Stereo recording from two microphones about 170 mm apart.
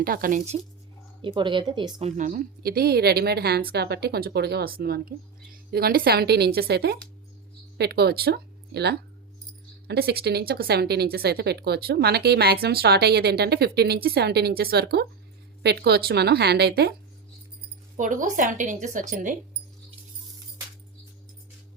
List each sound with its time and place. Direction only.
0.0 s a woman's voice: 60° right (ahead or behind)
1.2 s speech: 30° right (ahead or behind)
2.0 s speech: 50° right (ahead or behind); by 16.9 s 70° right (ahead or behind)
17.9 s a woman's voice: 50° right (ahead or behind)